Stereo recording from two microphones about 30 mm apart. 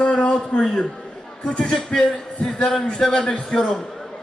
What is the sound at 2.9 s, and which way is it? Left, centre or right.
Speech, centre.